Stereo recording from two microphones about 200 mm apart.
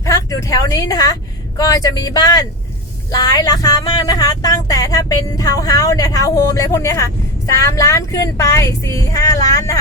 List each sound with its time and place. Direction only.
0.0 s speech: 15° left (ahead or behind)